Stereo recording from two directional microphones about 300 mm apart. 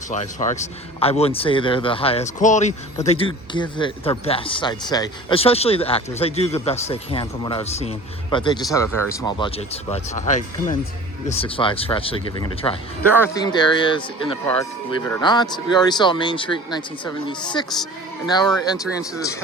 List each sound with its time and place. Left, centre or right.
0.1 s a man's voice: left
13.0 s speech: centre